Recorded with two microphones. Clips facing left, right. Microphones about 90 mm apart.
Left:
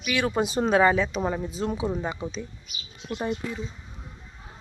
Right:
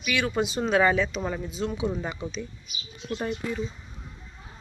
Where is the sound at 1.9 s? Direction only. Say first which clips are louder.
Left 2 dB; 20° left (ahead or behind).